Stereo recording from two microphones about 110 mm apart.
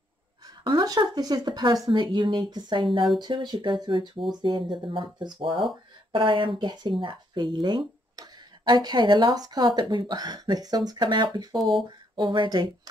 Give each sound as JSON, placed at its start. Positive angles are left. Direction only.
{"t": 0.5, "sound": "speech", "side_deg": -40}